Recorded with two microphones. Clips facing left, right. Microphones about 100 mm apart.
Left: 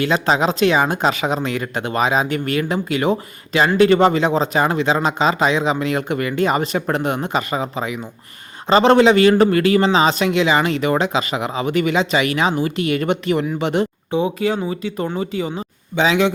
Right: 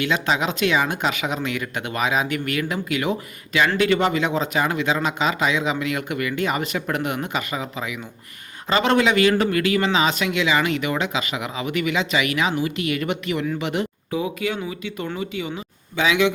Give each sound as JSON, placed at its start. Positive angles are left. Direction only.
{"t": 0.0, "sound": "a man's voice", "side_deg": 35}